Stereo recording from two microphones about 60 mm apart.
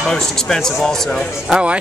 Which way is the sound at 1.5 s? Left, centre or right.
Centre.